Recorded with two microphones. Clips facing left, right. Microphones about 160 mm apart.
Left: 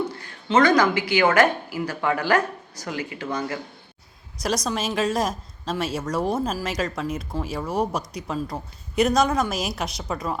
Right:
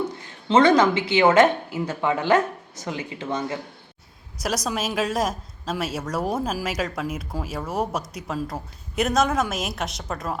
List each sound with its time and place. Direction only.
0.2 s speech: 25° right (ahead or behind)
4.4 s a woman's voice: 5° right (ahead or behind)